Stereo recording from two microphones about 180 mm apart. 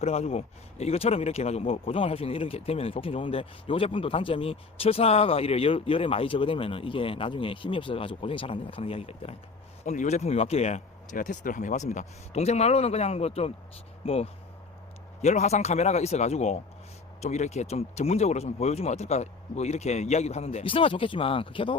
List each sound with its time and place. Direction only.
0.0 s speech: 35° left (ahead or behind)